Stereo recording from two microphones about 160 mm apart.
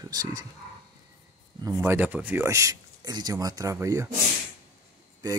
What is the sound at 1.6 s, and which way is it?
Speech, 15° right (ahead or behind).